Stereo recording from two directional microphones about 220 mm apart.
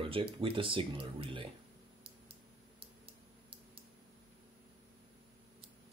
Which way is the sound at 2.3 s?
25° right (ahead or behind).